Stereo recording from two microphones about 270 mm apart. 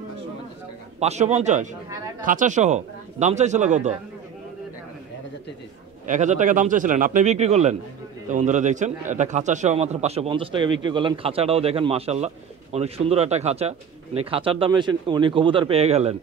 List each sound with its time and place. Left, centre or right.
0.9 s a man's voice: right
6.0 s a man's voice: right